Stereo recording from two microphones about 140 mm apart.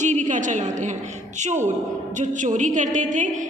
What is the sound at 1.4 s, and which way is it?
A woman's voice, 60° right (ahead or behind).